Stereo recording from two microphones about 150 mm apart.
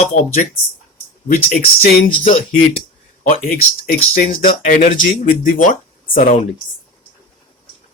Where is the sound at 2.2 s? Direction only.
50° left (ahead or behind).